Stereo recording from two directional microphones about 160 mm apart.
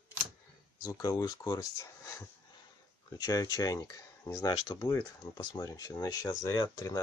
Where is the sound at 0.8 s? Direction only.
25° left (ahead or behind).